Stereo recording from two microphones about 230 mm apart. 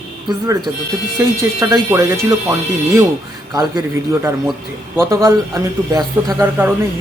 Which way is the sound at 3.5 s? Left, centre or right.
Centre.